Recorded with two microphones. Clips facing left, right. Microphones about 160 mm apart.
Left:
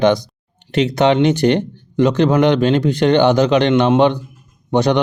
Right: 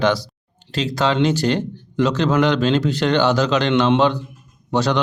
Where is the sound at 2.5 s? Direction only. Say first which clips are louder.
Left 3 dB; 15° left (ahead or behind).